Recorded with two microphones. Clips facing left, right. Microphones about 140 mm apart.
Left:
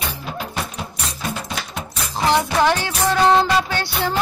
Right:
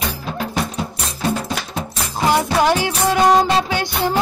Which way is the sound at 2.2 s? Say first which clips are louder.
Right 1 dB; 10° right (ahead or behind).